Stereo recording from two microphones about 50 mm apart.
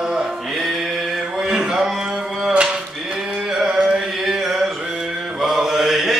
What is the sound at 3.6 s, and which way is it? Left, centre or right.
Carnatic music, centre.